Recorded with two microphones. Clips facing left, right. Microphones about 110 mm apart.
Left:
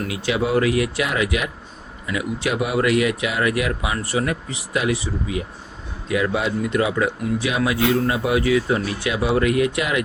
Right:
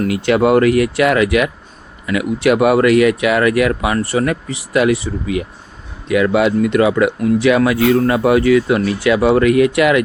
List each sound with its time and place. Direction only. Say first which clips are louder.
0.0 s speech: right 9 dB; 60° right (ahead or behind)